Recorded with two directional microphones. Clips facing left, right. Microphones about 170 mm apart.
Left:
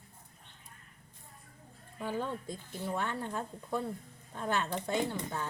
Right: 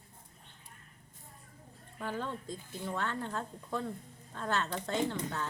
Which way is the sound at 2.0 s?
15° left (ahead or behind).